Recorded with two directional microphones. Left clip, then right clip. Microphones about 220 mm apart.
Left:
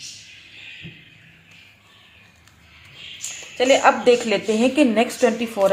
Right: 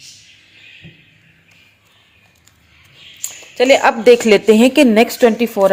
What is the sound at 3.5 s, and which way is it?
A woman's voice, 40° right (ahead or behind).